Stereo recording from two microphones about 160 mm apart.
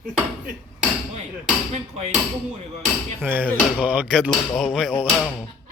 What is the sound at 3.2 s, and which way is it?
Hammer, 15° right (ahead or behind).